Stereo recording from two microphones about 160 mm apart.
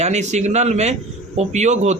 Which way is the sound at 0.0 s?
45° right (ahead or behind).